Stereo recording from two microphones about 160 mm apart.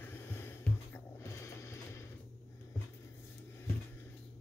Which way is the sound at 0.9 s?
15° left (ahead or behind).